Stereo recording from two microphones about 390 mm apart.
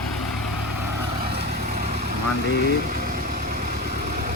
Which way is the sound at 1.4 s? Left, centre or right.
Right.